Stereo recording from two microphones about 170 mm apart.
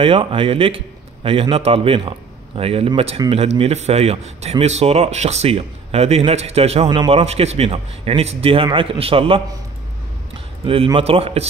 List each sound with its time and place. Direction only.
0.0 s a man's voice: 30° right (ahead or behind)
10.6 s a man's voice: 35° right (ahead or behind)